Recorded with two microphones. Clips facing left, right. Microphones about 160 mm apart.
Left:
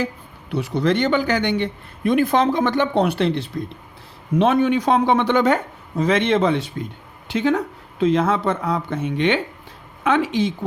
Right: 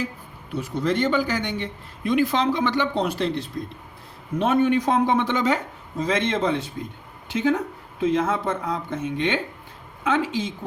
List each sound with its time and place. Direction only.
0.5 s a man's voice: 75° left (ahead or behind)
4.4 s a man's voice: 90° left; by 10.7 s 70° left (ahead or behind)